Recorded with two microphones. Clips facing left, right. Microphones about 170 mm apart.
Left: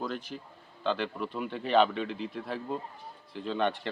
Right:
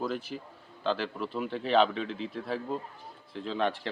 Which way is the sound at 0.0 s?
5° right (ahead or behind).